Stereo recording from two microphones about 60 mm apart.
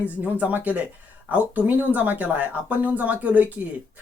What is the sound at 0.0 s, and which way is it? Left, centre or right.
Speech, right.